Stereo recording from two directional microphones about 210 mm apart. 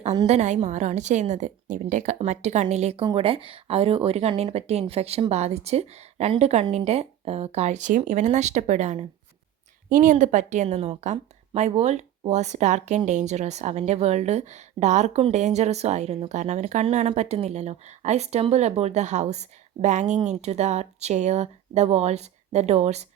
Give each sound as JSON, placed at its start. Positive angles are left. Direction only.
{"t": 0.0, "sound": "a woman's voice", "side_deg": -30}